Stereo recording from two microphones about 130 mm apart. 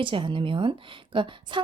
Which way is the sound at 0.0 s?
40° right (ahead or behind).